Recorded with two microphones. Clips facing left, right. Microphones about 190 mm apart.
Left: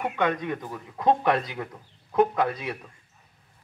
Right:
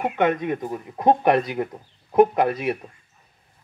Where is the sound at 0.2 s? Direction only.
20° right (ahead or behind).